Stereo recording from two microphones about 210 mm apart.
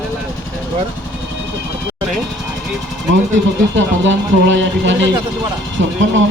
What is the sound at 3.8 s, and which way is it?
Music, 60° right (ahead or behind).